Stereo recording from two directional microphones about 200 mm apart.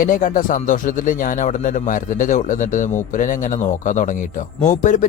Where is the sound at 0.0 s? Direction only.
40° left (ahead or behind).